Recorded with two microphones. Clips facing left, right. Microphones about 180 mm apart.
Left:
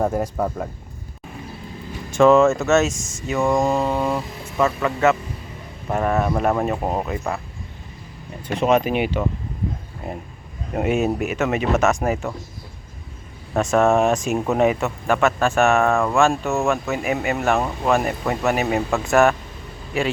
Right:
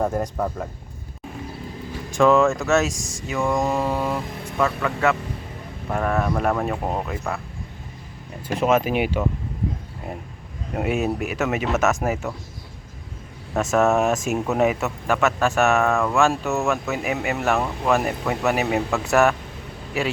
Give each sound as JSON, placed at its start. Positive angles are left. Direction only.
{"t": 0.0, "sound": "speech", "side_deg": 5}
{"t": 2.0, "sound": "speech", "side_deg": 0}
{"t": 3.8, "sound": "speech", "side_deg": -5}
{"t": 5.9, "sound": "speech", "side_deg": 20}
{"t": 6.7, "sound": "speech", "side_deg": 5}
{"t": 8.4, "sound": "speech", "side_deg": -5}
{"t": 10.8, "sound": "speech", "side_deg": 0}
{"t": 13.5, "sound": "speech", "side_deg": -5}